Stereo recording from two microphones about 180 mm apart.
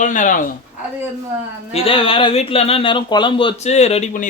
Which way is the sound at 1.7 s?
30° left (ahead or behind).